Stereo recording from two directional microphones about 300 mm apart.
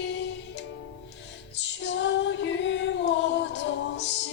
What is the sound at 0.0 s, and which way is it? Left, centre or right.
Music, left.